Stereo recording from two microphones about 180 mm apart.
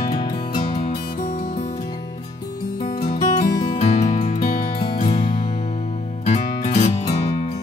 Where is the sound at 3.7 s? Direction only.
35° left (ahead or behind).